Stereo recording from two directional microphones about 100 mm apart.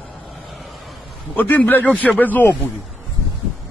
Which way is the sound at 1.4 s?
15° left (ahead or behind).